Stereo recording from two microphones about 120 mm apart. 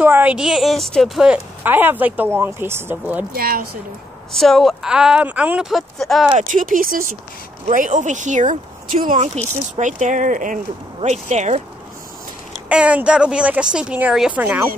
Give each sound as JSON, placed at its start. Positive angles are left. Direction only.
{"t": 0.0, "sound": "a woman's voice", "side_deg": -15}
{"t": 4.3, "sound": "speech", "side_deg": 5}
{"t": 6.3, "sound": "speech", "side_deg": -90}
{"t": 11.1, "sound": "speech", "side_deg": -75}
{"t": 12.6, "sound": "a woman's voice", "side_deg": -10}